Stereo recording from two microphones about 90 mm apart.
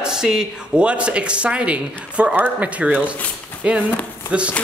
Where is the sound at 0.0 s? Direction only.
5° right (ahead or behind).